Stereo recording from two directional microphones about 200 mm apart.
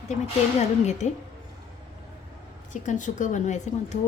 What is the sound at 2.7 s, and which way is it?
A woman's voice, 40° left (ahead or behind).